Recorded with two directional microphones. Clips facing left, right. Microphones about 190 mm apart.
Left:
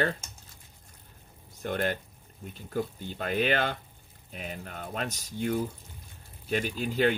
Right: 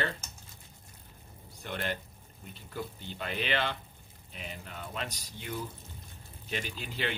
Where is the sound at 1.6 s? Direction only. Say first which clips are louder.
Left 6 dB; 45° left (ahead or behind).